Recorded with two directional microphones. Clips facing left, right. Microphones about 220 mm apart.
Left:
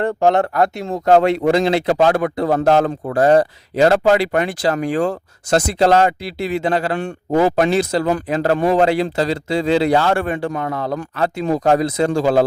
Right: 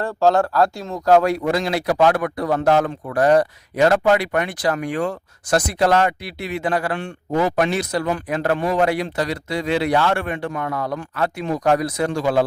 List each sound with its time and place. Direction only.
0.0 s a man's voice: 20° left (ahead or behind)